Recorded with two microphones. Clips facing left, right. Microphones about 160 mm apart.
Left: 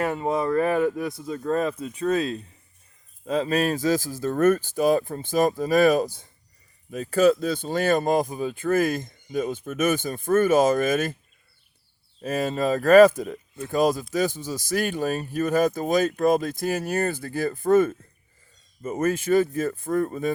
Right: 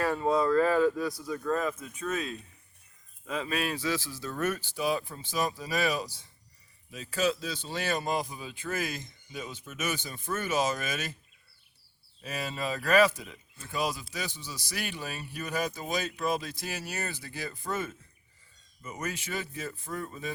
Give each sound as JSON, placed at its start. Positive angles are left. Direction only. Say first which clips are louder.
{"t": 0.0, "sound": "speech", "louder": "left 2 dB", "side_deg": 20}
{"t": 12.2, "sound": "speech", "louder": "left 10 dB", "side_deg": 45}